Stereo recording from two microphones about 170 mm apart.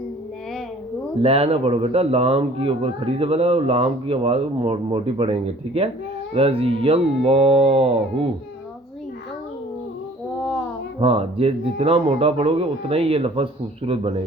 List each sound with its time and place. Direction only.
1.2 s speech: 35° right (ahead or behind)
11.0 s speech: 35° right (ahead or behind)